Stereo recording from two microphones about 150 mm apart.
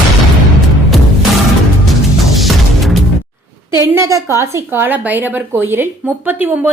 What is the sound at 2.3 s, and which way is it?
Music, centre (ahead or behind).